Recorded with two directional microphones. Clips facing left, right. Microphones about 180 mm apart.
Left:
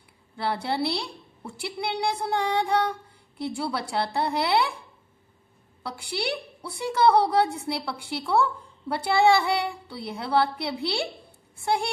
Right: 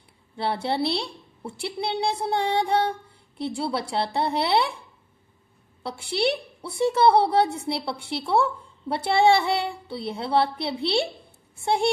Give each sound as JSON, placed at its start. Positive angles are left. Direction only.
{"t": 0.4, "sound": "a woman's voice", "side_deg": -30}
{"t": 5.8, "sound": "a woman's voice", "side_deg": -25}